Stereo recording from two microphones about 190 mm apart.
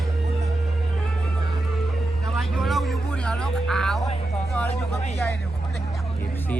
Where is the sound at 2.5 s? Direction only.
Centre (ahead or behind).